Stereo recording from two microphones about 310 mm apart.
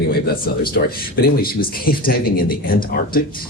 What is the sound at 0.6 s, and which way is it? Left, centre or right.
Speech, left.